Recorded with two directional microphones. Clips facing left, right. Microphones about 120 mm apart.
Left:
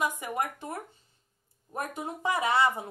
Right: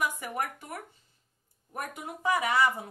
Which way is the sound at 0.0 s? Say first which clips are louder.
Left 2 dB; 20° left (ahead or behind).